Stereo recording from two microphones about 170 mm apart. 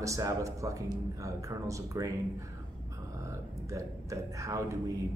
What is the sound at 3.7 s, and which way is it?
A man's voice, 20° right (ahead or behind).